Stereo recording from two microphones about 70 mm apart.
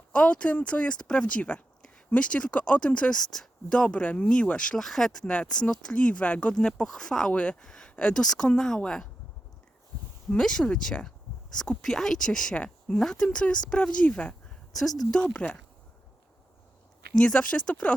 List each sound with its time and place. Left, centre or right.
0.1 s speech: centre
10.2 s speech: centre
14.7 s speech: centre
15.2 s speech: centre
17.2 s speech: centre